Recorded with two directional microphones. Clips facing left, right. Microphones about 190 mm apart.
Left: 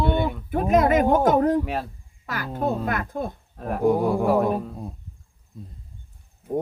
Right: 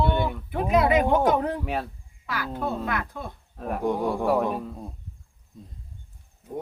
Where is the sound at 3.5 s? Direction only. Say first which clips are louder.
Left 5 dB; centre (ahead or behind).